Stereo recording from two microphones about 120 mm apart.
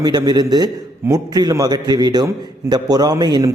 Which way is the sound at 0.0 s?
35° right (ahead or behind).